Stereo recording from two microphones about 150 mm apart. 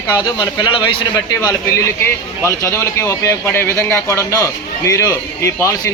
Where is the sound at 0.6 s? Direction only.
35° left (ahead or behind).